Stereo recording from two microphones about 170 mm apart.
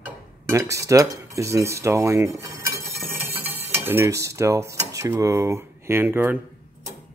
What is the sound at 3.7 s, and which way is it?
Cutlery, 15° right (ahead or behind).